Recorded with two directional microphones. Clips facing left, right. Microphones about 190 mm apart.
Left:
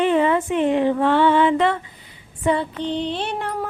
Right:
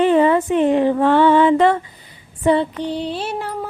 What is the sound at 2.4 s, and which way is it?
Female singing, 35° right (ahead or behind).